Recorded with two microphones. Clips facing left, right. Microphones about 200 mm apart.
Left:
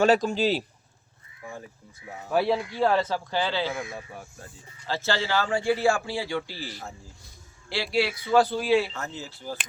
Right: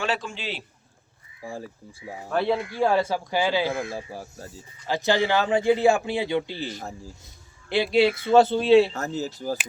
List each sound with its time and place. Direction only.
0.0 s a man's voice: 40° left (ahead or behind)
1.4 s a man's voice: 30° right (ahead or behind)
2.3 s speech: 5° left (ahead or behind)
2.8 s speech: 10° right (ahead or behind)
3.8 s speech: 30° right (ahead or behind)
4.9 s a man's voice: 15° right (ahead or behind)
8.9 s speech: 40° right (ahead or behind)